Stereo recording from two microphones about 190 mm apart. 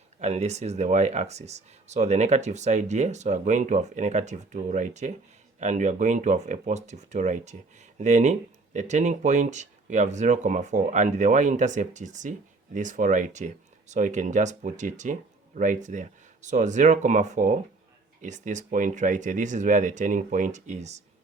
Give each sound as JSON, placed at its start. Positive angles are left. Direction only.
{"t": 0.2, "sound": "speech", "side_deg": -35}